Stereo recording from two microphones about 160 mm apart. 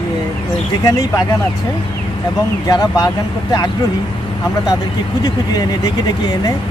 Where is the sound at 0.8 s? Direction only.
20° left (ahead or behind).